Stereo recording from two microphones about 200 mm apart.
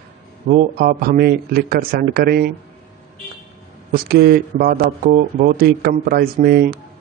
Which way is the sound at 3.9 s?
50° right (ahead or behind).